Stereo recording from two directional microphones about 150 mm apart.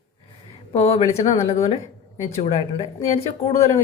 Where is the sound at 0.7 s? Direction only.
45° left (ahead or behind).